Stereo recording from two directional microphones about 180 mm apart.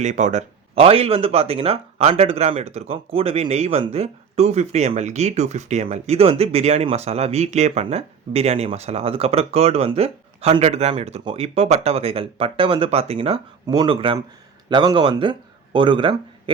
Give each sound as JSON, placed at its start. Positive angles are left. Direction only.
{"t": 0.0, "sound": "speech", "side_deg": -40}